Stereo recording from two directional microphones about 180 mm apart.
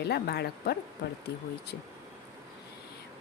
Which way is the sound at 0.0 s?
65° left (ahead or behind).